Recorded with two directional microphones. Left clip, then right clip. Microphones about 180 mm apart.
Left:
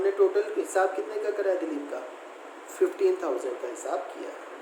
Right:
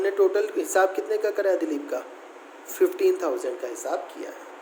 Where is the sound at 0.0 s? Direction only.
50° right (ahead or behind).